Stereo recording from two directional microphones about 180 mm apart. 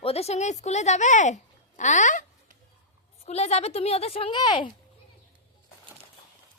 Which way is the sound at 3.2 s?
35° left (ahead or behind).